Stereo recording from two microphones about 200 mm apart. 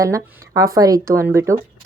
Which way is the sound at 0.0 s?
15° right (ahead or behind).